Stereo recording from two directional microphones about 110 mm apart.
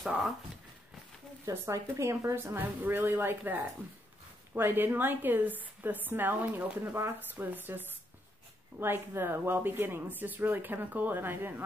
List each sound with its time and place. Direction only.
1.4 s a woman's voice: 30° right (ahead or behind)